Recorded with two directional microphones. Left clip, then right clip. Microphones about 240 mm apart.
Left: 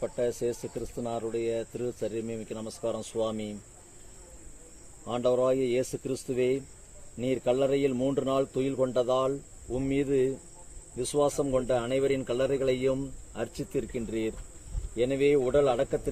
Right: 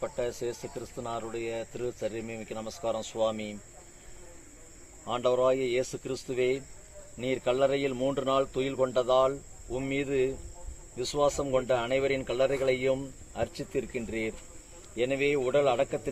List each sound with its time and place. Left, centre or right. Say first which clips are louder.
0.0 s speech: left 3 dB; left
5.0 s speech: even; left